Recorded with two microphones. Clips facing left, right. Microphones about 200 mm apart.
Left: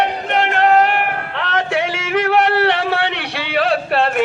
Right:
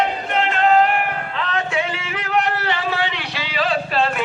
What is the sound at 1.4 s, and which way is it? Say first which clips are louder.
Music: left 4 dB; 75° left (ahead or behind).